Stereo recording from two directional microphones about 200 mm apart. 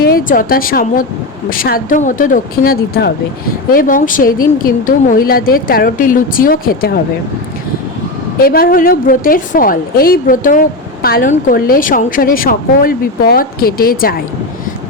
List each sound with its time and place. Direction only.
0.0 s a woman's voice: 45° left (ahead or behind)
8.4 s a woman's voice: 45° left (ahead or behind)